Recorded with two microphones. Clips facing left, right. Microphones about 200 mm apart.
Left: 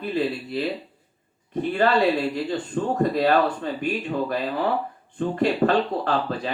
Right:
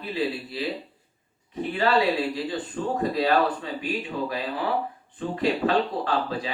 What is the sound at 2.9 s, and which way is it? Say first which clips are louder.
Speech: left 3 dB; 50° left (ahead or behind).